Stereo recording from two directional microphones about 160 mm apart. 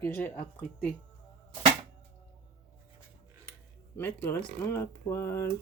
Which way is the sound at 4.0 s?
15° left (ahead or behind).